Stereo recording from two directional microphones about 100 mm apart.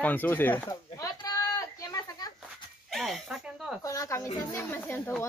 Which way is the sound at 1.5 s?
40° left (ahead or behind).